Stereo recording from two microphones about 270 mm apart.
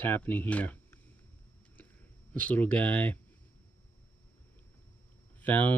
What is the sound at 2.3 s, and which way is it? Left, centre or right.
Speech, centre.